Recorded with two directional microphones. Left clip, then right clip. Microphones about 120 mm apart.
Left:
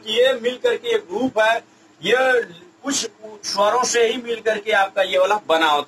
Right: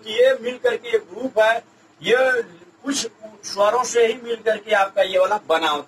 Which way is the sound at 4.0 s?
30° left (ahead or behind).